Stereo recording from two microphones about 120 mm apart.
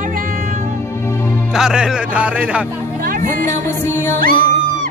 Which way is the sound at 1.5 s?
5° right (ahead or behind).